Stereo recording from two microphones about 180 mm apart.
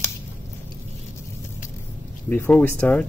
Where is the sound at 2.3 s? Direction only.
10° left (ahead or behind).